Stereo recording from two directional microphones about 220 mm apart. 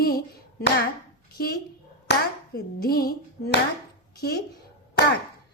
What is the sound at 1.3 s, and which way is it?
Speech, 45° left (ahead or behind).